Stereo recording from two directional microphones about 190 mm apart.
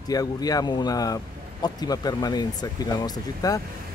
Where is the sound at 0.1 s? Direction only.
20° left (ahead or behind).